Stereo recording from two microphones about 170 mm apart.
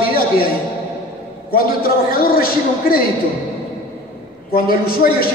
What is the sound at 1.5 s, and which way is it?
A man's voice, 60° left (ahead or behind).